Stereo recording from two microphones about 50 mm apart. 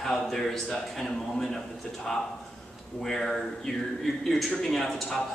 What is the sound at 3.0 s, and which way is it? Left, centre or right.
A man's voice, centre.